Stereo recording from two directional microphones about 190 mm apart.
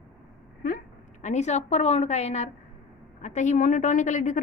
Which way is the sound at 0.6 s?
45° left (ahead or behind).